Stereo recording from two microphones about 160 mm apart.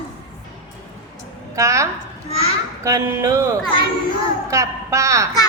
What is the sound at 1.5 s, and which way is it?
A woman's voice, 20° right (ahead or behind).